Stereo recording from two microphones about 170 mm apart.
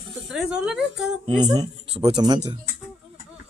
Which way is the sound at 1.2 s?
25° right (ahead or behind).